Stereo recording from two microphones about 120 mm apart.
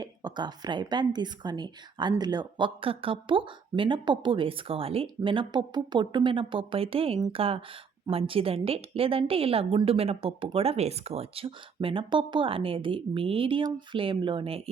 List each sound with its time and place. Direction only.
0.0 s a woman's voice: 35° right (ahead or behind)